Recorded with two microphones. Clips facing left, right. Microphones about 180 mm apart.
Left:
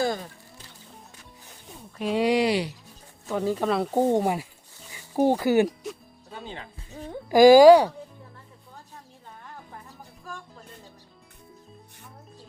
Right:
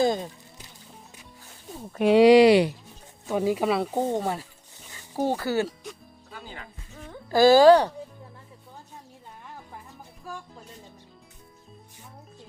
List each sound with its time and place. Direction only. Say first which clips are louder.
0.0 s a sound: right 3 dB; 20° right (ahead or behind)
1.9 s speech: right 8 dB; 65° right (ahead or behind)
3.2 s speech: right 1 dB; 15° right (ahead or behind)
4.0 s speech: left 4 dB; 15° left (ahead or behind)
6.9 s speech: left 6 dB; 35° left (ahead or behind)
7.3 s speech: left 3 dB; 10° left (ahead or behind)